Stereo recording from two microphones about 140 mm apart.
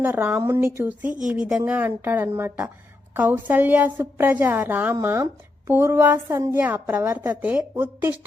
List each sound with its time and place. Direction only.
0.0 s a woman's voice: 15° right (ahead or behind)